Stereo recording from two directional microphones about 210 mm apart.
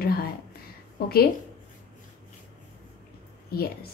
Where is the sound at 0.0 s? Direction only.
45° left (ahead or behind).